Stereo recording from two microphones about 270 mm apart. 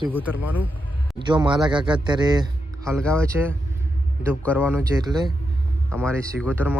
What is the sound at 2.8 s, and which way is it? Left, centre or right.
Speech, centre.